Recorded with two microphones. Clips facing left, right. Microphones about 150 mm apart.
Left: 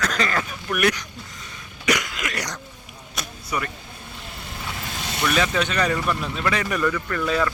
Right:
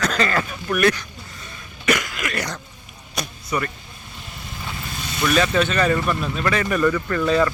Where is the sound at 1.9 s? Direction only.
15° left (ahead or behind).